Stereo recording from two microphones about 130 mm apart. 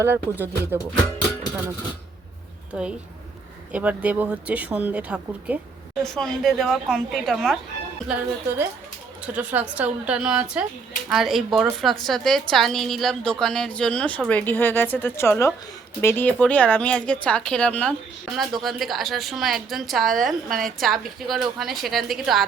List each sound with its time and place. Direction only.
0.0 s speech: 15° right (ahead or behind)
3.7 s speech: 10° right (ahead or behind)
6.0 s a woman's voice: 5° left (ahead or behind)
8.0 s a woman's voice: 10° right (ahead or behind)